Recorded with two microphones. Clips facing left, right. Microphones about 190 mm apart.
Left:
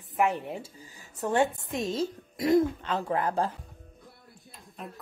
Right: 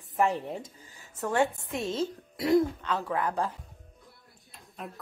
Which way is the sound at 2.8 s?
25° left (ahead or behind).